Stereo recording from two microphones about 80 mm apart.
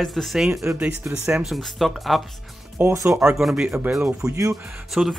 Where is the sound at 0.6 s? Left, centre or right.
Right.